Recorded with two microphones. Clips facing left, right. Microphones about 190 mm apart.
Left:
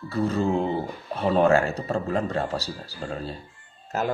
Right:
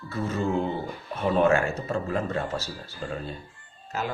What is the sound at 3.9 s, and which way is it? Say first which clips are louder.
Speech: left 5 dB; 50° left (ahead or behind).